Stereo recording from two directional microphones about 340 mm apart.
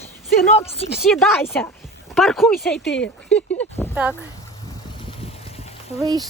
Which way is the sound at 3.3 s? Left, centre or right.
Centre.